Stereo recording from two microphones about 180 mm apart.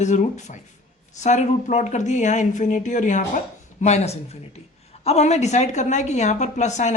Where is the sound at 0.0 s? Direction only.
40° left (ahead or behind).